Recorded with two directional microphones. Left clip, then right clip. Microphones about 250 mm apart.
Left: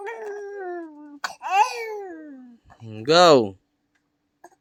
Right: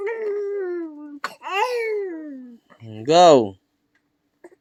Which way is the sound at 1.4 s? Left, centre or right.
Centre.